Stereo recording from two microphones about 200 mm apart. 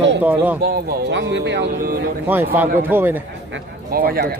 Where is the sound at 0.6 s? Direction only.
60° right (ahead or behind).